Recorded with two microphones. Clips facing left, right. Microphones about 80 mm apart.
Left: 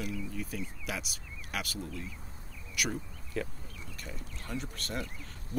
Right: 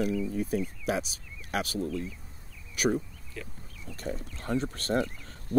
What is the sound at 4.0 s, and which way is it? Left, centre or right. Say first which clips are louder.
Speech: right 10 dB; right.